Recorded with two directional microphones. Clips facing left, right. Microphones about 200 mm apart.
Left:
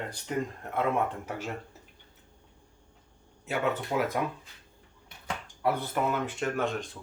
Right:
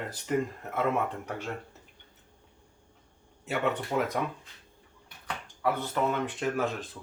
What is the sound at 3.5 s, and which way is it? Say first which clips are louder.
Speech: even; centre (ahead or behind).